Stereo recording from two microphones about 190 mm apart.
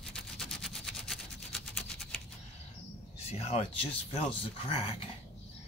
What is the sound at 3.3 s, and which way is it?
Speech, 35° left (ahead or behind).